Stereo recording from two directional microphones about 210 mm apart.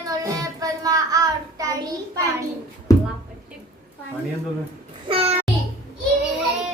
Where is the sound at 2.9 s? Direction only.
15° left (ahead or behind).